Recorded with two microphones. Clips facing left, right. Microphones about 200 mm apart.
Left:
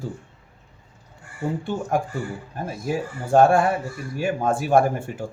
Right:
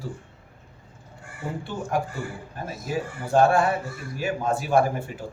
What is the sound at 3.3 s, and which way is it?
Speech, 50° left (ahead or behind).